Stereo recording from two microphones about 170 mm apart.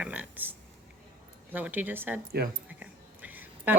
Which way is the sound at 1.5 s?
10° right (ahead or behind).